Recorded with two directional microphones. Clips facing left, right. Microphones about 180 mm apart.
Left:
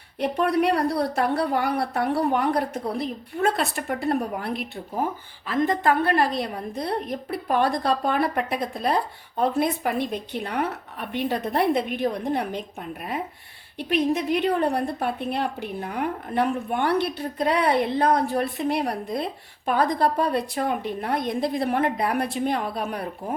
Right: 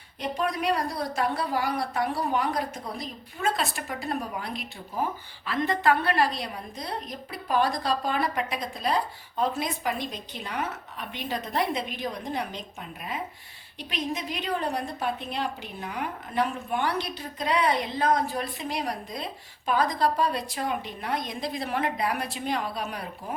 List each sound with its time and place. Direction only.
0.2 s a woman's voice: 65° left (ahead or behind)
5.5 s a woman's voice: 45° left (ahead or behind)
13.7 s a woman's voice: 60° left (ahead or behind)